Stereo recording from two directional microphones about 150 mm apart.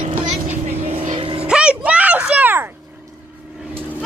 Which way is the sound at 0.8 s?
40° right (ahead or behind).